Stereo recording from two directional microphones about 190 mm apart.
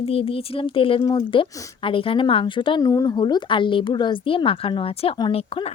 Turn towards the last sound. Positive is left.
turn(degrees=30)  # may be behind; listen again after turning